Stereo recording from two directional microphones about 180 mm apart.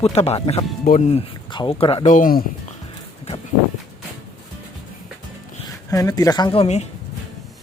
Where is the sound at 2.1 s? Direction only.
50° left (ahead or behind).